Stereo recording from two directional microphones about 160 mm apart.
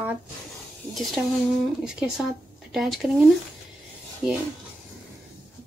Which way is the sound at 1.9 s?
5° right (ahead or behind).